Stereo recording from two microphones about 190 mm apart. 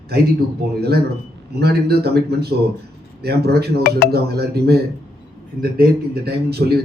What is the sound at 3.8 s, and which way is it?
Speech, 55° left (ahead or behind).